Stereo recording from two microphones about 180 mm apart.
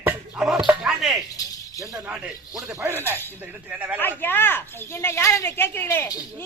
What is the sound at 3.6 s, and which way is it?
Speech, 10° right (ahead or behind).